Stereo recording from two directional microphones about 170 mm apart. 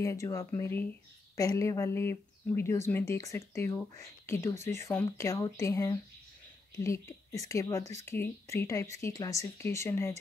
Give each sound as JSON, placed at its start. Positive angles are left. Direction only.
{"t": 0.0, "sound": "speech", "side_deg": 20}